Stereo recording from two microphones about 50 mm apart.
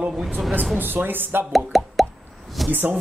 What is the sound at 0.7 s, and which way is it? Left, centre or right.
Speech, right.